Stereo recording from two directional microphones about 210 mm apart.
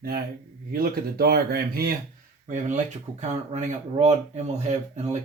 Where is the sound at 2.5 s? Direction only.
35° right (ahead or behind).